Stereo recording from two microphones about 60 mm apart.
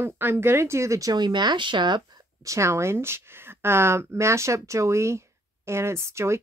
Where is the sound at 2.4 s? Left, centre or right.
Right.